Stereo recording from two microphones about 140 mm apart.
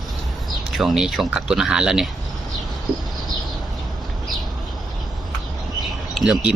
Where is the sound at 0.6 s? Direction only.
Centre (ahead or behind).